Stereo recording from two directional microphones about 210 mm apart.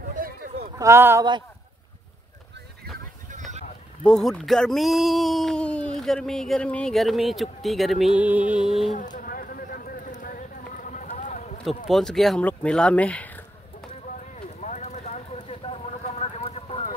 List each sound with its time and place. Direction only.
0.1 s a sound: 40° right (ahead or behind)
0.7 s speech: 10° right (ahead or behind)
4.0 s a man's voice: centre (ahead or behind)
8.9 s a sound: 35° left (ahead or behind)
11.9 s a man's voice: centre (ahead or behind)
14.6 s clip-clop: 35° left (ahead or behind)